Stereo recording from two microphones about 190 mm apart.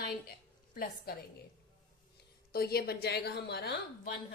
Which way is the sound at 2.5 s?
55° left (ahead or behind).